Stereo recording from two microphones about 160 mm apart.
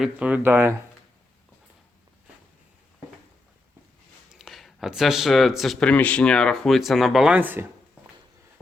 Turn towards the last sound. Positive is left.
turn(degrees=-10)  # may be behind; listen again after turning